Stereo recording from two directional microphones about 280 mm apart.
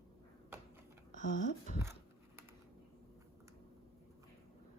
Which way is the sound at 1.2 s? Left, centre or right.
Left.